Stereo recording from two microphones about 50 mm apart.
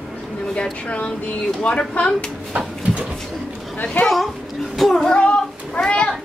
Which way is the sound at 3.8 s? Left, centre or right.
Left.